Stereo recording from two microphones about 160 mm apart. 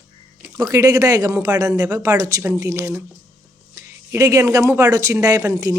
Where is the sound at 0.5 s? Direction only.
20° right (ahead or behind).